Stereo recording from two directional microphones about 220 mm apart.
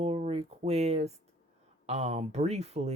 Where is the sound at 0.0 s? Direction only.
25° right (ahead or behind).